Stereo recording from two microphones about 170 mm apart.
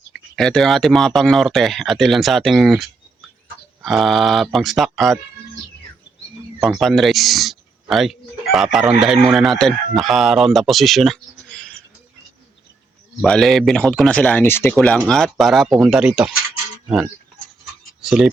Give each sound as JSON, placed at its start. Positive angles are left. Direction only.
{"t": 0.3, "sound": "speech", "side_deg": 0}
{"t": 6.6, "sound": "a sound", "side_deg": 0}
{"t": 8.5, "sound": "speech", "side_deg": 0}
{"t": 13.2, "sound": "speech", "side_deg": 0}